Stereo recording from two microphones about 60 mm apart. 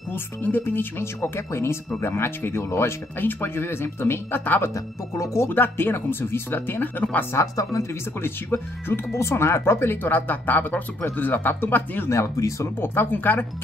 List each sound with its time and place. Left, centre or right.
0.1 s speech: left
4.7 s speech: left
5.5 s speech: left
7.3 s speech: left
8.2 s speech: left
12.1 s speech: left
12.8 s speech: left